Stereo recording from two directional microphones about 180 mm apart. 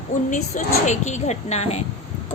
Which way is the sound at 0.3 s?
40° left (ahead or behind).